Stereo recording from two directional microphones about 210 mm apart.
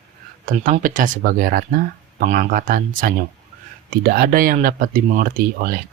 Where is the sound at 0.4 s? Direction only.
40° right (ahead or behind).